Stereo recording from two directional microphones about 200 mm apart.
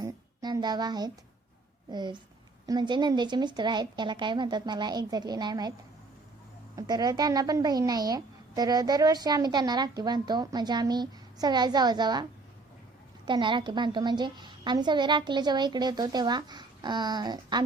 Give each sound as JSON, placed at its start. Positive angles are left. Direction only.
{"t": 0.0, "sound": "a sound", "side_deg": -20}
{"t": 1.9, "sound": "a woman's voice", "side_deg": -20}
{"t": 6.7, "sound": "a woman's voice", "side_deg": -20}
{"t": 13.2, "sound": "a woman's voice", "side_deg": -25}